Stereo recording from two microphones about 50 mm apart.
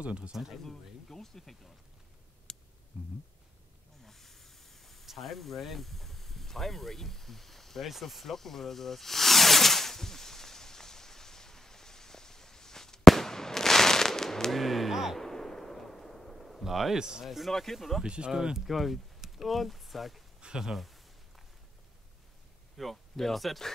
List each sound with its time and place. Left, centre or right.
0.0 s speech: right
0.7 s speech: centre
2.5 s a sound: centre
4.0 s hiss: centre
5.0 s a sound: centre
7.9 s snake: centre
15.1 s artillery fire: centre
17.0 s speech: centre
17.5 s speech: centre
18.0 s speech: centre
18.7 s speech: centre
20.3 s speech: centre
20.7 s speech: centre
22.8 s speech: centre